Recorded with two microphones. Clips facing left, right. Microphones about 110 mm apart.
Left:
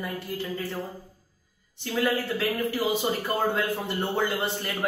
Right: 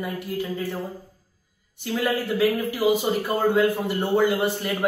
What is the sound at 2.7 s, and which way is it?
Speech, 15° right (ahead or behind).